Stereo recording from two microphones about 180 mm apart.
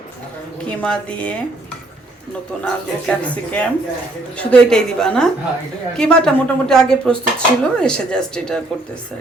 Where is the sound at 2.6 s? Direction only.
5° left (ahead or behind).